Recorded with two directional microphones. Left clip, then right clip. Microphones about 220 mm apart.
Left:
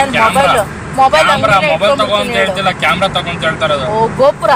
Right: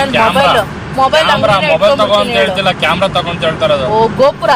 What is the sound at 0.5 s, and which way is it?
Speech, 20° right (ahead or behind).